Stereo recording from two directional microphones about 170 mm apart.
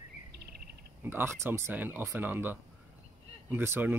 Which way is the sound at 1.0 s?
15° right (ahead or behind).